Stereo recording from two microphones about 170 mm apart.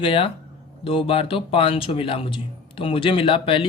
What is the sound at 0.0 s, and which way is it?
Speech, 30° left (ahead or behind).